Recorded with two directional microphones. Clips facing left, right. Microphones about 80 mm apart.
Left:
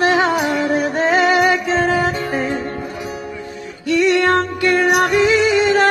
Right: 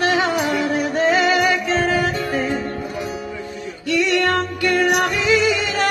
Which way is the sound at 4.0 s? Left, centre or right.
Left.